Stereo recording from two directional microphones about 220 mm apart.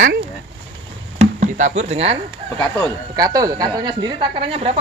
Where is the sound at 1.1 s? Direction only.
30° right (ahead or behind).